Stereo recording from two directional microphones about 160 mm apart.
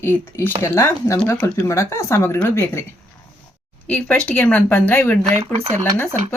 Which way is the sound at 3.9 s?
10° left (ahead or behind).